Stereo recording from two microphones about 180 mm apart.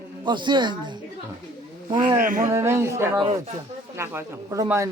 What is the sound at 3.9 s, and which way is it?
Speech, 15° right (ahead or behind).